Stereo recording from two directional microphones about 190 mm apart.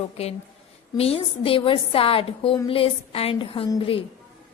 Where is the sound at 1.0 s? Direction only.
30° left (ahead or behind).